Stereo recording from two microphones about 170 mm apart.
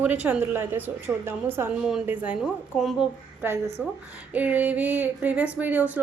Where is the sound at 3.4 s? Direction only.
10° right (ahead or behind).